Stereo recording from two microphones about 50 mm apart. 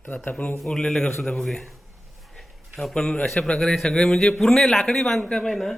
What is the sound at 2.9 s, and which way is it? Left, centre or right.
A man's voice, centre.